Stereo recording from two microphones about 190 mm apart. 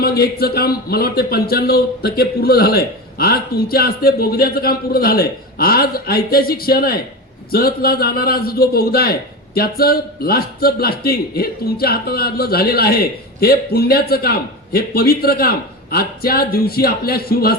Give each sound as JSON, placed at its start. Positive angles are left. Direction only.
{"t": 0.0, "sound": "a man's voice", "side_deg": 55}